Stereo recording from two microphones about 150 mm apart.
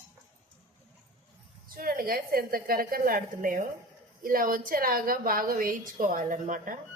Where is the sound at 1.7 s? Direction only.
75° right (ahead or behind).